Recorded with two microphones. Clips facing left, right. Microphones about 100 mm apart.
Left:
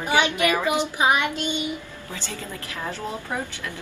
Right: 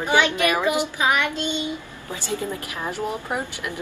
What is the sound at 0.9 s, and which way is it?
Child singing, 20° left (ahead or behind).